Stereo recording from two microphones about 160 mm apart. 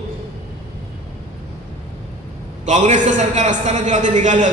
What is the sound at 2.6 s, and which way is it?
A man's voice, 50° right (ahead or behind).